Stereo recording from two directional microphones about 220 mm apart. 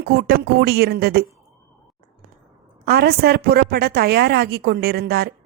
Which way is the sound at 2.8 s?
45° right (ahead or behind).